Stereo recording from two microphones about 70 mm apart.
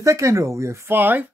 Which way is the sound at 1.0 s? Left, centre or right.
Right.